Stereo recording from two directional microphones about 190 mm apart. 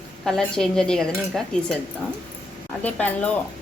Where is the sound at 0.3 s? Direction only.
5° left (ahead or behind).